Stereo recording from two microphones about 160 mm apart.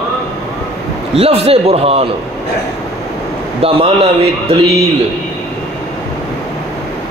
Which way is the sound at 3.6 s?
40° right (ahead or behind).